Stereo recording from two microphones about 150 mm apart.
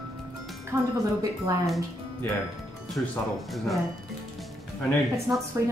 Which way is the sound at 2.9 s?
Centre (ahead or behind).